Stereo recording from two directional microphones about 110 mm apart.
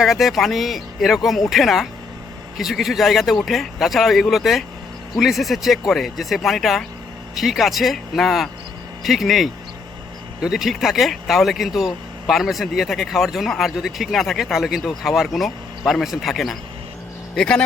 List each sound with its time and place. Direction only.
0.0 s speech: centre (ahead or behind)